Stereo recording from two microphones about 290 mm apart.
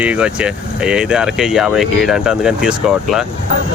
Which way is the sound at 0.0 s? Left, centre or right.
Centre.